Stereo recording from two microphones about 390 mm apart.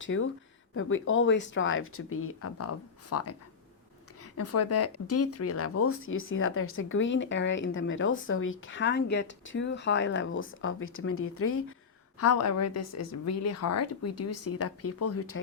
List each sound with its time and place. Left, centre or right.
0.0 s speech: left
4.4 s speech: left